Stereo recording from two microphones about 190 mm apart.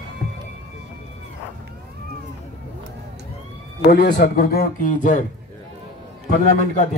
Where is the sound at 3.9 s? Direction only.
55° left (ahead or behind).